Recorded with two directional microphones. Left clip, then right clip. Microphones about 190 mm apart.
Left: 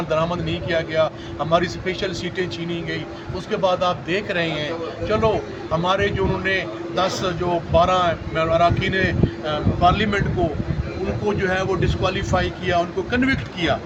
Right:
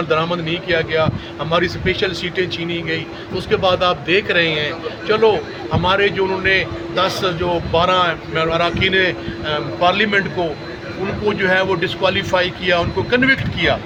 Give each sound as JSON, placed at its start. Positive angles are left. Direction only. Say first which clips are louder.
{"t": 0.1, "sound": "speech", "louder": "right 2 dB", "side_deg": 5}
{"t": 11.3, "sound": "speech", "louder": "right 6 dB", "side_deg": 5}